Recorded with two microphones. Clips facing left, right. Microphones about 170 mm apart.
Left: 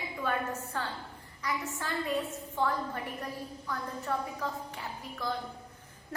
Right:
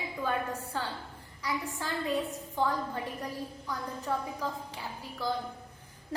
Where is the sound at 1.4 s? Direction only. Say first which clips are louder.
Right 1 dB; 10° right (ahead or behind).